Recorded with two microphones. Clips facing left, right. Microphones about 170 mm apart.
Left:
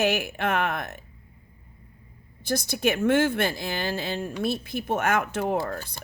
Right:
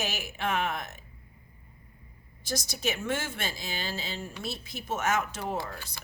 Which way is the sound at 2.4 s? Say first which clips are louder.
Left 7 dB; 55° left (ahead or behind).